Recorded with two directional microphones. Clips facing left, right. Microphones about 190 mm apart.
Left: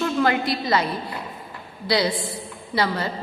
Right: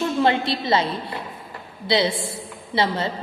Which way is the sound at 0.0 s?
25° right (ahead or behind).